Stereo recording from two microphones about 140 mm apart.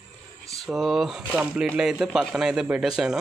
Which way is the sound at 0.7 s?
Centre (ahead or behind).